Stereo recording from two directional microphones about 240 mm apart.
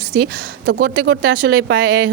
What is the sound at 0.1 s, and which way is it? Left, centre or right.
A woman's voice, right.